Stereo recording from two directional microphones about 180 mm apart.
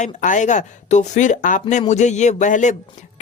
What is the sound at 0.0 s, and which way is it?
Speech, 45° left (ahead or behind).